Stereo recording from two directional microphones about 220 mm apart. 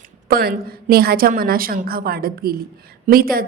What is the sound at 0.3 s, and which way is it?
A woman's voice, 45° right (ahead or behind).